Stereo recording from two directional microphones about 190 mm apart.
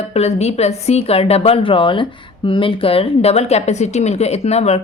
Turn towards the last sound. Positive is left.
turn(degrees=35)  # may be behind; listen again after turning